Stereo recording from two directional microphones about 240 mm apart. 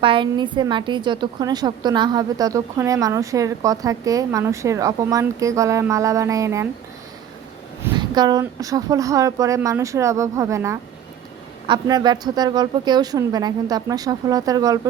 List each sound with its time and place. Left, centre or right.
0.0 s a woman's voice: right
7.9 s a woman's voice: centre